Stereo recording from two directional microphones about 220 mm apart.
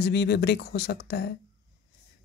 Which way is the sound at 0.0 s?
50° left (ahead or behind).